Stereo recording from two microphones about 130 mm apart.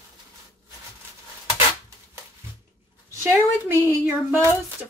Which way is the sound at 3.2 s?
15° right (ahead or behind).